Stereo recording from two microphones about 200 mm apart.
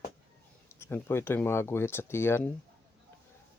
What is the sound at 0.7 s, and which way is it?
Speech, 10° left (ahead or behind).